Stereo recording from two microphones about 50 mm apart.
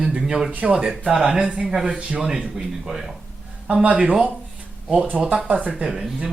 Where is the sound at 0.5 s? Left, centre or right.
Right.